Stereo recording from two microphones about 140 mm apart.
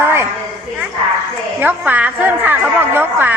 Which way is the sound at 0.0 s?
15° right (ahead or behind).